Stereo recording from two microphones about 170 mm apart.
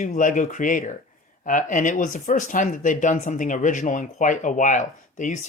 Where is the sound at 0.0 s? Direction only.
50° left (ahead or behind).